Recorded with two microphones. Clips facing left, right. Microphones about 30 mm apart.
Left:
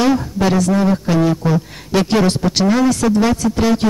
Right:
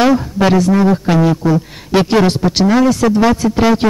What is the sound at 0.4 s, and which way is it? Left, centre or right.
Speech, centre.